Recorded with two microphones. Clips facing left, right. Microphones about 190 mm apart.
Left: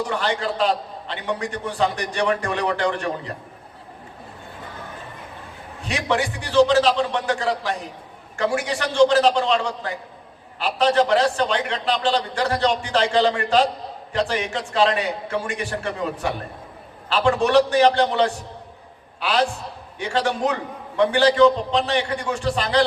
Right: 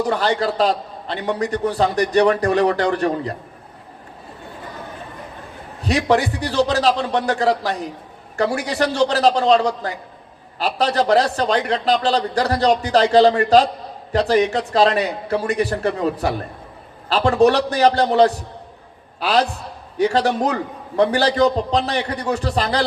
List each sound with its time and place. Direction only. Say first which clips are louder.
0.0 s a man's voice: right 5 dB; 40° right (ahead or behind)
5.8 s a man's voice: right 6 dB; 40° right (ahead or behind)